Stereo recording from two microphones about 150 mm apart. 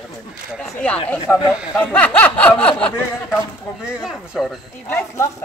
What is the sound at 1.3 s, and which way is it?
Speech, 15° left (ahead or behind).